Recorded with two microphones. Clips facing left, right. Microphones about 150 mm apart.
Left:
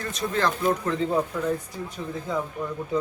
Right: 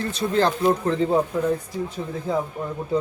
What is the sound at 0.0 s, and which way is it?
Speech, 30° right (ahead or behind).